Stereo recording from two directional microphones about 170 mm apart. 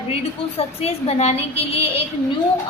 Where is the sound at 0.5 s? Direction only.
35° left (ahead or behind).